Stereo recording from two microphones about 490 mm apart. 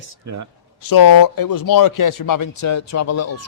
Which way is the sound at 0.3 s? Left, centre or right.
Right.